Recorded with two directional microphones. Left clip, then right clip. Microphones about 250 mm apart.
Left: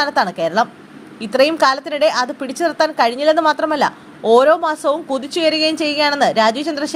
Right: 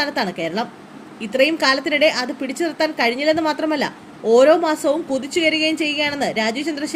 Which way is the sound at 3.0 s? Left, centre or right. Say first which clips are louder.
Left 2 dB; left.